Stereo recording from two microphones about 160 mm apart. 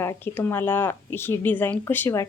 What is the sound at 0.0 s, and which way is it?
Speech, 15° left (ahead or behind).